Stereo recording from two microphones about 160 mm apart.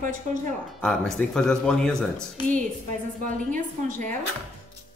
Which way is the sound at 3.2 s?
55° right (ahead or behind).